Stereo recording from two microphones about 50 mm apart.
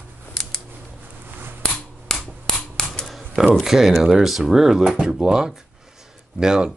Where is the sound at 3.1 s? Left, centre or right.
Centre.